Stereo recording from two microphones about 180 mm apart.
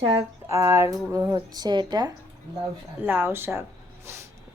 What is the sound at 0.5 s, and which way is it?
A woman's voice, 15° right (ahead or behind).